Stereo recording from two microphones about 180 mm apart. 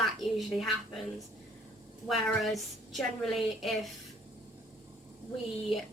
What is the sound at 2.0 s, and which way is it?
A woman's voice, centre (ahead or behind).